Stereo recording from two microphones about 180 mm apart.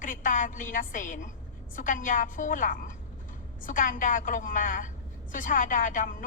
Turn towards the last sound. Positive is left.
turn(degrees=45)  # may be behind; listen again after turning